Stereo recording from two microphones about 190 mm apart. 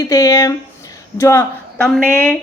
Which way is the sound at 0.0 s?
20° left (ahead or behind).